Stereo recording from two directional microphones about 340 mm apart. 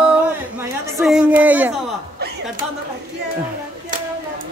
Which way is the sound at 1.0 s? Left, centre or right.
Centre.